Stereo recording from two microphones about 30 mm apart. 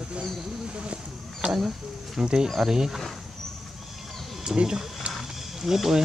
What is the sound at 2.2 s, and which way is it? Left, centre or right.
Speech, right.